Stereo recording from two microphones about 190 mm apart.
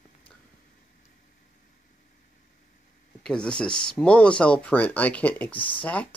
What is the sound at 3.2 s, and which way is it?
Speech, 5° left (ahead or behind).